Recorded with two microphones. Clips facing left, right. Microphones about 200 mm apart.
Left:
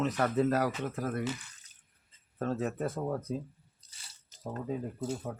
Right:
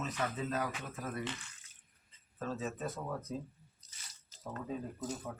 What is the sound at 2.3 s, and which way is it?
Speech, 60° left (ahead or behind).